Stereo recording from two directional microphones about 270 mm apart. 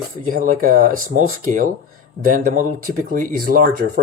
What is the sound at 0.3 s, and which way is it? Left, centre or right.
Speech, right.